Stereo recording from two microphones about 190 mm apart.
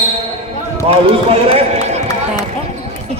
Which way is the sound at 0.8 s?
30° right (ahead or behind).